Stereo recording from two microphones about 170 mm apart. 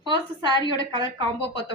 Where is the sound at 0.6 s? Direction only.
30° left (ahead or behind).